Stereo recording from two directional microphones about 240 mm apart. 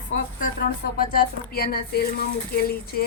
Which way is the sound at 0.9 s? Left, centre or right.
Left.